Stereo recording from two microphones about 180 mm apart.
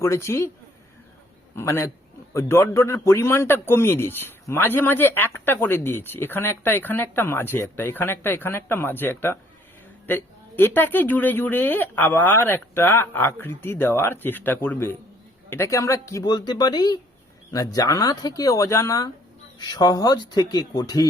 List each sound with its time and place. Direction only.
0.0 s a man's voice: 15° left (ahead or behind)
1.5 s a man's voice: 15° left (ahead or behind)